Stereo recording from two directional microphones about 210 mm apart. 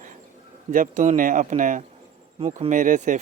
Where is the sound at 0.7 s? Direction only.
40° right (ahead or behind).